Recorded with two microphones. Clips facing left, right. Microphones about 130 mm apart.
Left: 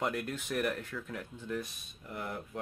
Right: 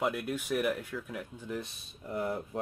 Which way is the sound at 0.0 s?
5° right (ahead or behind).